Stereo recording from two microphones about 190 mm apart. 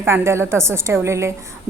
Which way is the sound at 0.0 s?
15° right (ahead or behind).